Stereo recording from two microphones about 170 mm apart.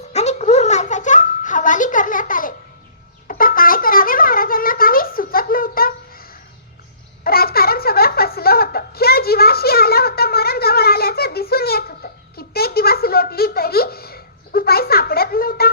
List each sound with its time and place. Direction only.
0.1 s baby laughter: 40° left (ahead or behind)
3.2 s a sound: 55° left (ahead or behind)
7.3 s giggle: 65° left (ahead or behind)